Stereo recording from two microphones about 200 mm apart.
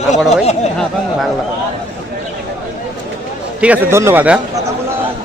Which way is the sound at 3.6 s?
10° right (ahead or behind).